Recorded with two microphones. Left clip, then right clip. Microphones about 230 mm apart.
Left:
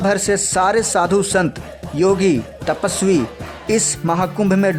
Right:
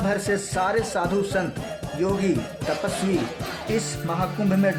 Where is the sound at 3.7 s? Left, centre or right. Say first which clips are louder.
Left 9 dB; left.